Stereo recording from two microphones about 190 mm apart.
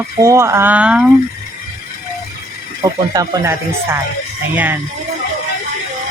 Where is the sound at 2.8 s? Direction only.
20° right (ahead or behind).